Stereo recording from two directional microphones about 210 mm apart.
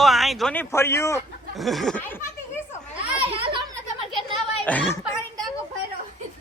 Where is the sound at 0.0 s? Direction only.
Centre (ahead or behind).